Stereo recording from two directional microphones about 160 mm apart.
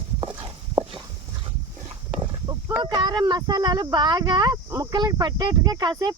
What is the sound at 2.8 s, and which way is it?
Speech, 25° right (ahead or behind).